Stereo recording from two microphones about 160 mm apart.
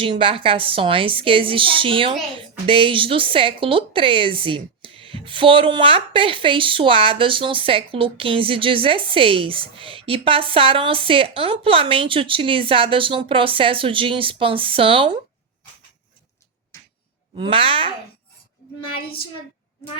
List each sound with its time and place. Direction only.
0.0 s a woman's voice: 35° right (ahead or behind)
16.7 s a sound: 20° left (ahead or behind)
17.3 s a woman's voice: 35° right (ahead or behind)